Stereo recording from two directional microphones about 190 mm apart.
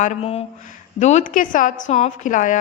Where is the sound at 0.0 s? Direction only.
35° left (ahead or behind).